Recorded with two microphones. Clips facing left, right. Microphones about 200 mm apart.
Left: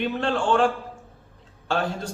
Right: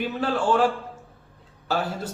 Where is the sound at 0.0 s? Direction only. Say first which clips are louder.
Even; 5° right (ahead or behind).